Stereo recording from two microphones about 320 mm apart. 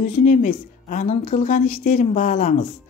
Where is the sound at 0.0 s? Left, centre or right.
Left.